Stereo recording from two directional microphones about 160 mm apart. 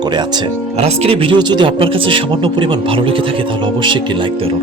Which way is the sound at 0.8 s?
35° right (ahead or behind).